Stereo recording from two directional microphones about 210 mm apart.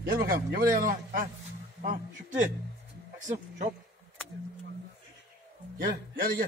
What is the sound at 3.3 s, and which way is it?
Speech, 35° right (ahead or behind).